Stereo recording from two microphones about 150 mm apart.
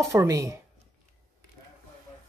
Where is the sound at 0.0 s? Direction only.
20° right (ahead or behind).